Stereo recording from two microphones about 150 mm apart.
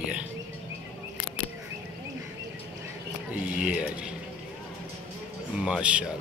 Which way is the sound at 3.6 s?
10° right (ahead or behind).